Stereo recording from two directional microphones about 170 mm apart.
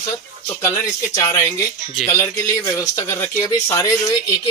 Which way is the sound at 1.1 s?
20° left (ahead or behind).